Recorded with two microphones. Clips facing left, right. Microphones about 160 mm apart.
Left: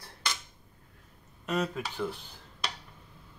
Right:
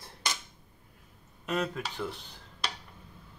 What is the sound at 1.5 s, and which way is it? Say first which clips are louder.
Cutlery: left 1 dB; centre (ahead or behind).